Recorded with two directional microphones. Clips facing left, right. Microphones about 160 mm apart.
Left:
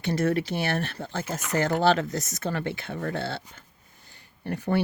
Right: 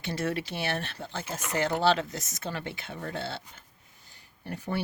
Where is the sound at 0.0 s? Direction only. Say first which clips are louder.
Left 6 dB; 50° left (ahead or behind).